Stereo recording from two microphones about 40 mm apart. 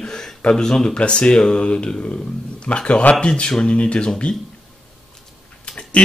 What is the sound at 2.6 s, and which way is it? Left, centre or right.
Speech, left.